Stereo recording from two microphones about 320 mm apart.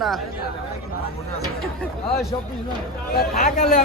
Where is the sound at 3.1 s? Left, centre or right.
Left.